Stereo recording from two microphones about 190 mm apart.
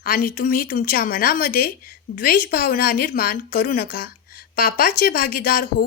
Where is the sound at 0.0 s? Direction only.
50° left (ahead or behind).